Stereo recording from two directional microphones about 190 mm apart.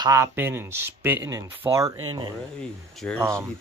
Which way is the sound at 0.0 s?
15° right (ahead or behind).